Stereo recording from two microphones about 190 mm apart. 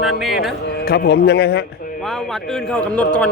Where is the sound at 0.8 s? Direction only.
55° left (ahead or behind).